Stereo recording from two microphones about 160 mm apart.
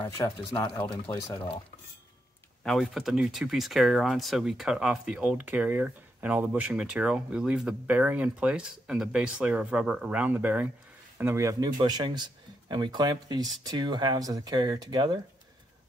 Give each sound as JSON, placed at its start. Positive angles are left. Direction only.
{"t": 0.0, "sound": "speech", "side_deg": 20}
{"t": 2.6, "sound": "speech", "side_deg": 0}